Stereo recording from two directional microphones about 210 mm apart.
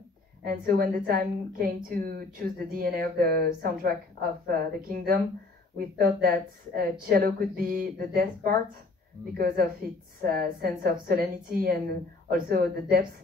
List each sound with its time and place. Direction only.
0.4 s speech: 45° right (ahead or behind)
10.2 s speech: 45° right (ahead or behind)